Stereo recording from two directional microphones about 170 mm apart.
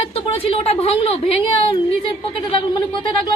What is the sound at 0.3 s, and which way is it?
A woman's voice, 35° left (ahead or behind).